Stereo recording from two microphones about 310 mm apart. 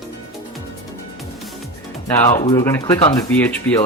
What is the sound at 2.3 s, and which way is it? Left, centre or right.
Speech, left.